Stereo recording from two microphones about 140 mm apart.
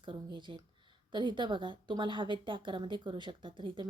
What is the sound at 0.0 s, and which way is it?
A woman's voice, 35° right (ahead or behind).